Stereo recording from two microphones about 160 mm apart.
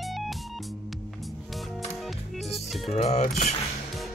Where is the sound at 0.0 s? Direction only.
Centre (ahead or behind).